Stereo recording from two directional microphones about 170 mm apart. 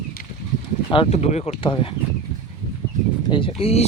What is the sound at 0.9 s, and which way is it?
Speech, 35° left (ahead or behind).